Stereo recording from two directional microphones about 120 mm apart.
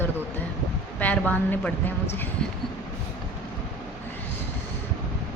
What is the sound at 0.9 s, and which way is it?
Speech, 15° left (ahead or behind).